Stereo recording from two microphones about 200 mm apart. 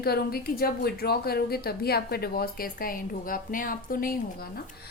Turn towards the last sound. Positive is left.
turn(degrees=45)  # may be behind; listen again after turning